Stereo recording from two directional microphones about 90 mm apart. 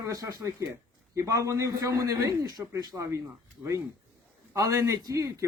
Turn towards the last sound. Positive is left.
turn(degrees=-35)  # may be behind; listen again after turning